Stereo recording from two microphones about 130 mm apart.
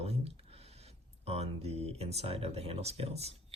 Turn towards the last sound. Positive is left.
turn(degrees=-55)  # may be behind; listen again after turning